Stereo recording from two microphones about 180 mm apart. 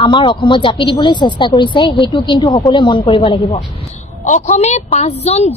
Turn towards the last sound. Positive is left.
turn(degrees=35)  # may be behind; listen again after turning